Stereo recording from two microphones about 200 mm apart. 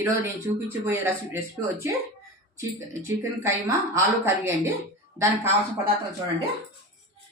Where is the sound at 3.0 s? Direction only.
15° right (ahead or behind).